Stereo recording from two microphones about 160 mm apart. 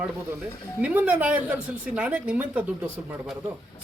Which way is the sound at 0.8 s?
10° right (ahead or behind).